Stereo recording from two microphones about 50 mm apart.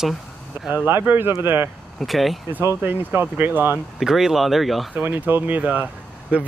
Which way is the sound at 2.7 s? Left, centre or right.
Right.